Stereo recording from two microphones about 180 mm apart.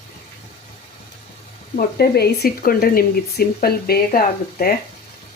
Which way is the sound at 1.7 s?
60° left (ahead or behind).